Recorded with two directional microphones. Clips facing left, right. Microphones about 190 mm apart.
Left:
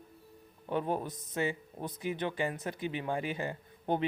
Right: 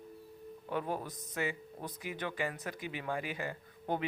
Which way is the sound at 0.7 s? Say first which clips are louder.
Left 4 dB; 25° left (ahead or behind).